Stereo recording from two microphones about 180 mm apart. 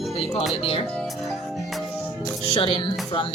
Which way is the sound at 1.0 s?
Centre (ahead or behind).